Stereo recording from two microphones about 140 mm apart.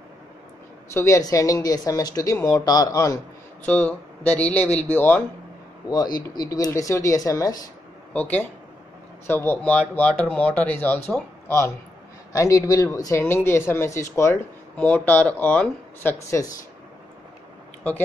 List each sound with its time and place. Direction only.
0.9 s speech: 20° left (ahead or behind)
3.6 s speech: 10° left (ahead or behind)
5.9 s speech: 25° left (ahead or behind)
8.1 s a man's voice: 10° left (ahead or behind)
16.3 s speech: 25° left (ahead or behind)